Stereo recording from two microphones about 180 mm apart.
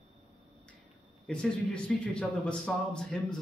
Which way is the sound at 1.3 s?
5° left (ahead or behind).